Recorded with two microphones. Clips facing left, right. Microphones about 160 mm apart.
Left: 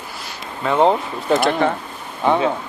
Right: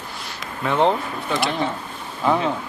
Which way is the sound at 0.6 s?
10° left (ahead or behind).